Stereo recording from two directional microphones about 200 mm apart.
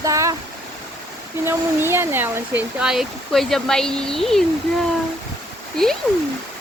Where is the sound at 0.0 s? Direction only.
15° right (ahead or behind).